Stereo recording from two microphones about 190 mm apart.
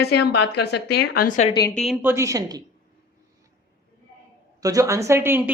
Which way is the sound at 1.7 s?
Centre (ahead or behind).